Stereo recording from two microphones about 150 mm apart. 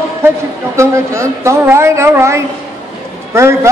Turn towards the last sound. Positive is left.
turn(degrees=-20)  # may be behind; listen again after turning